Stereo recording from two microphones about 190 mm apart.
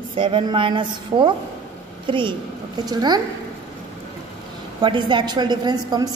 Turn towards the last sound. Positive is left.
turn(degrees=-20)  # may be behind; listen again after turning